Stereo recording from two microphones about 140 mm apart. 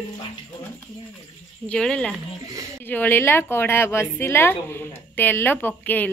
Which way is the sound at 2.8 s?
15° left (ahead or behind).